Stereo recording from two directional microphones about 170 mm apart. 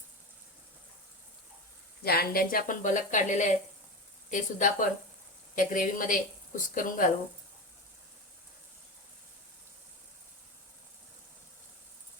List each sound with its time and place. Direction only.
2.0 s speech: 60° left (ahead or behind)